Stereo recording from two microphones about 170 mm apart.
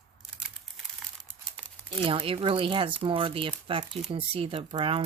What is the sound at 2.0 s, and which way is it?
Speech, 30° right (ahead or behind).